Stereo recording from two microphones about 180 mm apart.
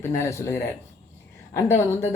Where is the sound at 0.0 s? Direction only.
15° left (ahead or behind).